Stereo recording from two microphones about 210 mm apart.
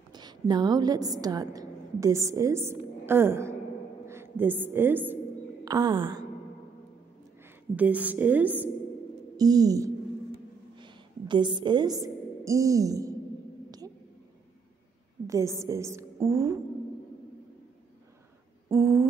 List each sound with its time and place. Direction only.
0.1 s a woman's voice: 20° right (ahead or behind)
7.7 s a woman's voice: 5° right (ahead or behind)
15.2 s a woman's voice: 15° right (ahead or behind)
18.7 s a sound: 10° right (ahead or behind)